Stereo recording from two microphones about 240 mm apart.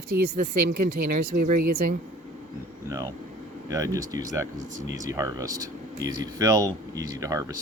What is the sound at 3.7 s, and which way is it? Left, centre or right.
Speech, centre.